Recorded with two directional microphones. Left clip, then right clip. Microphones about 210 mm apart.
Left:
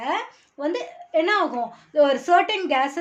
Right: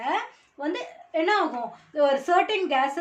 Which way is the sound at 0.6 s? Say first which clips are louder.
Left 4 dB; 50° left (ahead or behind).